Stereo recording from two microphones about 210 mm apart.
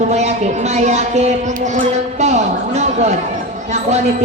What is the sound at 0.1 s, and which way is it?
Speech, 30° right (ahead or behind).